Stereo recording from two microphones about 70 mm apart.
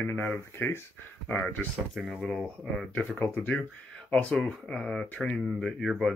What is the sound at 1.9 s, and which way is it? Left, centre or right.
Speech, centre.